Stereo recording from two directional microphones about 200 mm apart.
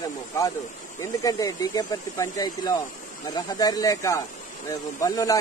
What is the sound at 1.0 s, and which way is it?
Speech, 15° left (ahead or behind).